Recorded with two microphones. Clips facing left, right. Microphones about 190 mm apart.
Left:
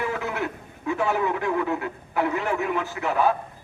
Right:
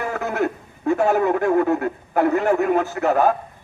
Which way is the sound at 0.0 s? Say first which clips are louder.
Right 5 dB; 45° right (ahead or behind).